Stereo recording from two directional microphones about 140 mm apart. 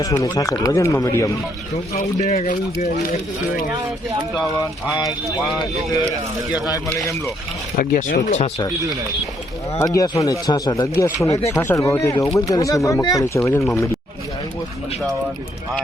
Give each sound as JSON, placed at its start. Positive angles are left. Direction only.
{"t": 0.0, "sound": "speech", "side_deg": 25}
{"t": 2.0, "sound": "speech", "side_deg": 55}
{"t": 7.8, "sound": "speech", "side_deg": 75}
{"t": 9.7, "sound": "speech", "side_deg": 25}